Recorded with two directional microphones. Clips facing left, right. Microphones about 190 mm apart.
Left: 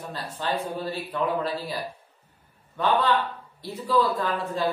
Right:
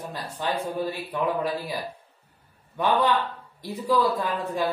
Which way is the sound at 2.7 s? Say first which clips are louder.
Even; 15° right (ahead or behind).